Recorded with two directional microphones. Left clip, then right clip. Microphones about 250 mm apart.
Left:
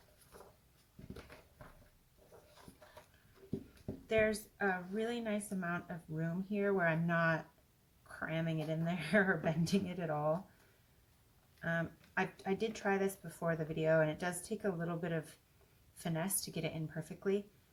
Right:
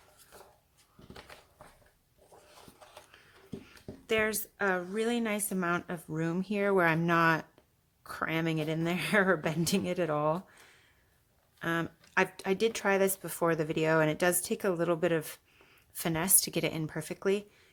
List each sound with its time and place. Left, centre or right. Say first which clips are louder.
4.0 s speech: right 3 dB; right
11.6 s speech: right 6 dB; right